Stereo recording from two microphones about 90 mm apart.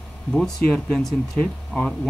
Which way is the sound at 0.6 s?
10° left (ahead or behind).